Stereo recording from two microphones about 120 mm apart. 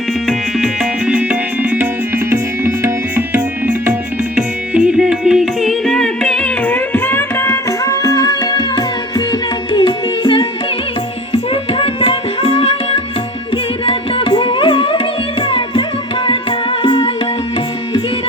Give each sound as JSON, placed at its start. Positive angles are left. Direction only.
{"t": 0.3, "sound": "music", "side_deg": -5}
{"t": 11.3, "sound": "music", "side_deg": 50}